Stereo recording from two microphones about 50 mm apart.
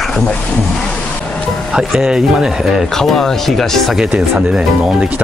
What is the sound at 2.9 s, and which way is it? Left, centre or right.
Speech, centre.